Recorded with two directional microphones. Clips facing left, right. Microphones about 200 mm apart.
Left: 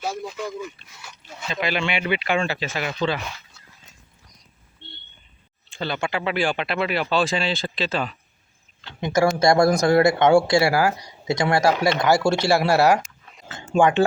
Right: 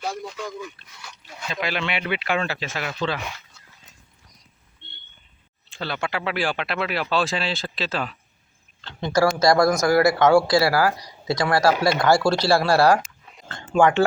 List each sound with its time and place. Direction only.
0.3 s speech: 5° left (ahead or behind)
5.6 s speech: centre (ahead or behind)
8.8 s speech: 15° left (ahead or behind)
13.5 s a sound: 5° left (ahead or behind)
13.7 s speech: 15° left (ahead or behind)